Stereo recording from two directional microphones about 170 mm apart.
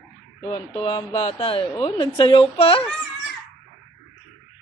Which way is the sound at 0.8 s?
30° left (ahead or behind).